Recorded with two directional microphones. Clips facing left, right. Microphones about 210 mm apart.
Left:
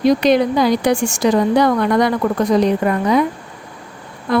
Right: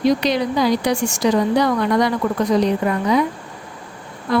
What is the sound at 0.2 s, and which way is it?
Speech, 55° left (ahead or behind).